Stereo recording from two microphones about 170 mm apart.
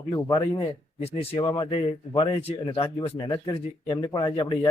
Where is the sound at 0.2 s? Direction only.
20° left (ahead or behind).